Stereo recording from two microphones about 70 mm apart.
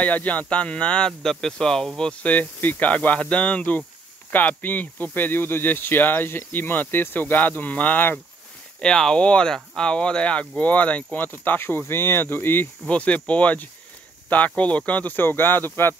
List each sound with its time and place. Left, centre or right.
0.0 s speech: left
8.8 s speech: centre; by 12.6 s left
12.8 s speech: centre